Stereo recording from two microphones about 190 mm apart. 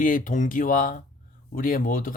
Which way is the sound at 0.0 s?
45° left (ahead or behind).